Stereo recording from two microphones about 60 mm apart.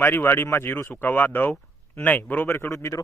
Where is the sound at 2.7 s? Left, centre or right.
Left.